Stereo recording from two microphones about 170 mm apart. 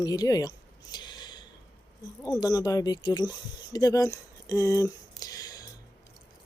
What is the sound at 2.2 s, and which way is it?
Speech, 20° left (ahead or behind).